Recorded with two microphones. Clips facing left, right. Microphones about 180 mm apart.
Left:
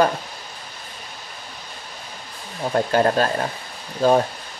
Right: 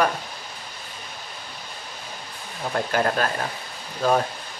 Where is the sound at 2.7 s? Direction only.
30° left (ahead or behind).